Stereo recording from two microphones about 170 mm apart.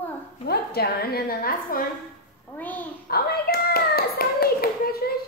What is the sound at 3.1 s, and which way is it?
Hands, 65° left (ahead or behind).